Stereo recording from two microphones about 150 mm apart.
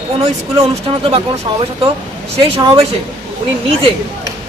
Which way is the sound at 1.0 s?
40° right (ahead or behind).